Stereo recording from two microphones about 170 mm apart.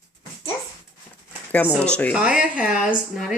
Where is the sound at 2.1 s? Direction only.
5° right (ahead or behind).